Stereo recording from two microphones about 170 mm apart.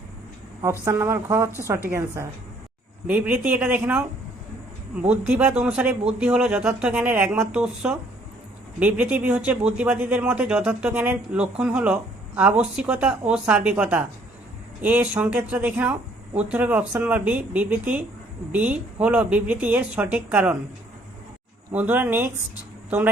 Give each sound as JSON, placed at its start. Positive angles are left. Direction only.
{"t": 0.6, "sound": "speech", "side_deg": -15}
{"t": 5.0, "sound": "speech", "side_deg": -5}
{"t": 21.7, "sound": "speech", "side_deg": -10}